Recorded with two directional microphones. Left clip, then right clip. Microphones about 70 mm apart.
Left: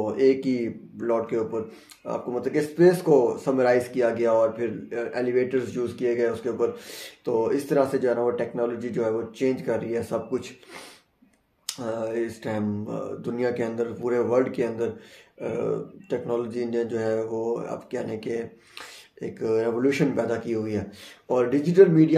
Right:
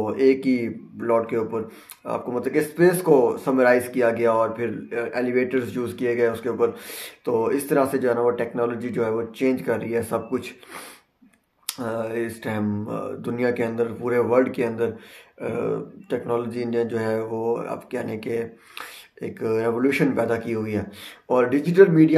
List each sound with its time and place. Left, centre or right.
0.0 s speech: left